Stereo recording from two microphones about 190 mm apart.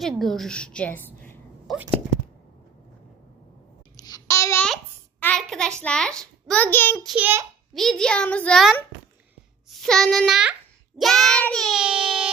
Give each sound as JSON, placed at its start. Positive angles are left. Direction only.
{"t": 0.2, "sound": "a woman's voice", "side_deg": 0}
{"t": 3.9, "sound": "a sound", "side_deg": 20}
{"t": 5.2, "sound": "a child's voice", "side_deg": 5}
{"t": 6.9, "sound": "child singing", "side_deg": 0}